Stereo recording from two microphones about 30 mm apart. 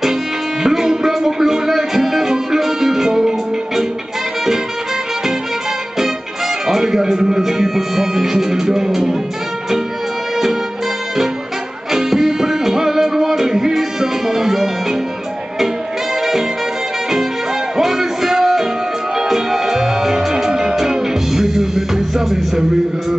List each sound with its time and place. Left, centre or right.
0.7 s music: centre
6.7 s music: centre
12.1 s music: centre
17.7 s music: centre